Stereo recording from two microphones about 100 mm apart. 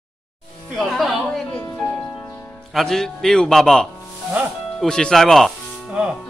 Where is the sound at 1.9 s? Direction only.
15° left (ahead or behind).